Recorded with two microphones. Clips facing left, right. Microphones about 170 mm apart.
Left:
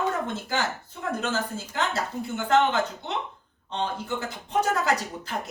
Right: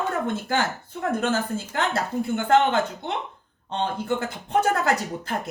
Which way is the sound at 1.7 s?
55° right (ahead or behind).